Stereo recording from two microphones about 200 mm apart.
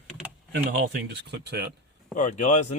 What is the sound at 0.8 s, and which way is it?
Speech, 55° right (ahead or behind).